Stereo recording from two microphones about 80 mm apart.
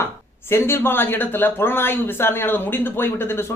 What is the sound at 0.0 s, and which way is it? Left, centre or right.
Speech, left.